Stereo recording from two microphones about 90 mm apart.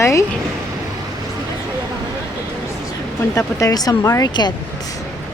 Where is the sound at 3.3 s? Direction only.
35° left (ahead or behind).